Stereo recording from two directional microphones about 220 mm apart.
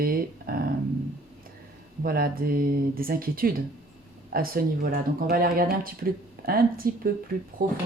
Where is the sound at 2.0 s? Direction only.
40° right (ahead or behind).